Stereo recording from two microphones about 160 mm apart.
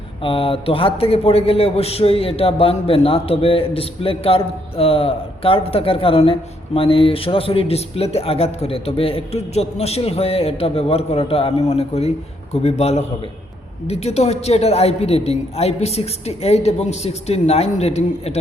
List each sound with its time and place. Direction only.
0.2 s a man's voice: 35° left (ahead or behind)